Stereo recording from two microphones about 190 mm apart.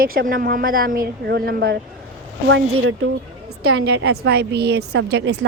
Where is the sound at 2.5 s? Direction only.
85° right.